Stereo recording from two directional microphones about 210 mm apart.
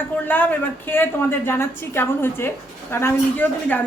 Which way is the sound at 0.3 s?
10° left (ahead or behind).